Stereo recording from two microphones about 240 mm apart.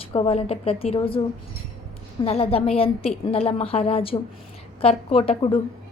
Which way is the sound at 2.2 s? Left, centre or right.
Left.